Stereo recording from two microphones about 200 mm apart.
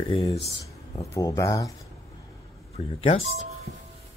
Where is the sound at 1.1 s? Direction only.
15° left (ahead or behind).